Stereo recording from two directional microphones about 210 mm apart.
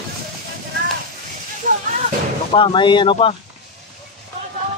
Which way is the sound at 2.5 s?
25° left (ahead or behind).